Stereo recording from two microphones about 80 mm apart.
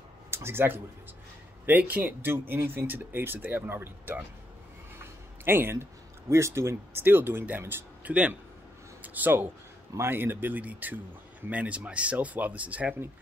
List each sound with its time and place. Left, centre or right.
0.3 s speech: right